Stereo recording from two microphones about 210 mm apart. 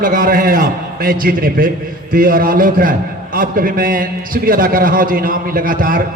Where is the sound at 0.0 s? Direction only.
40° right (ahead or behind).